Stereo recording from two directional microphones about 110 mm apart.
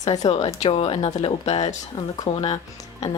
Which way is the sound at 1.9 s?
45° left (ahead or behind).